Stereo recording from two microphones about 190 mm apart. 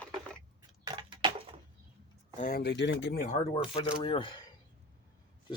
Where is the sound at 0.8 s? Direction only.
25° right (ahead or behind).